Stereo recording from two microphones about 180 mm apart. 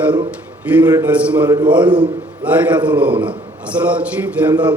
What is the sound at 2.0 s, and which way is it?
Speech, 5° right (ahead or behind).